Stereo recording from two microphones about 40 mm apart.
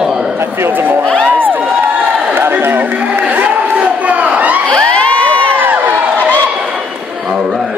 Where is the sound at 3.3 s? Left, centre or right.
Right.